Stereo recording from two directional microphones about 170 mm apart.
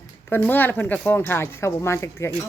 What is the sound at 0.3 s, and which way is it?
Speech, 10° left (ahead or behind).